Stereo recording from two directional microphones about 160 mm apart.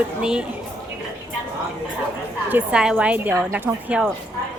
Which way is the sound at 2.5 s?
10° right (ahead or behind).